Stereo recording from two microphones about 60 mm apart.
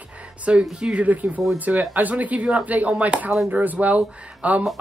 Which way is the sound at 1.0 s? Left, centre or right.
Right.